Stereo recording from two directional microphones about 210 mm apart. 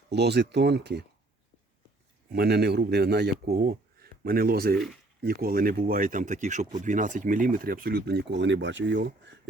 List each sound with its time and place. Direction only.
0.1 s speech: 55° right (ahead or behind)
2.3 s speech: 50° right (ahead or behind)